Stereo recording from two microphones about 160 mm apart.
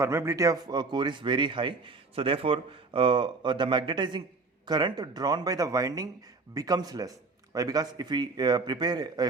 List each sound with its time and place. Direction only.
0.0 s a man's voice: 15° right (ahead or behind)